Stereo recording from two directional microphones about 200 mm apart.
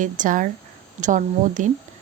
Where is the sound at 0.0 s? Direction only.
40° right (ahead or behind).